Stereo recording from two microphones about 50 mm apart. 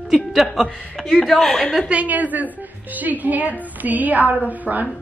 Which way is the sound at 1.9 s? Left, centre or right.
Right.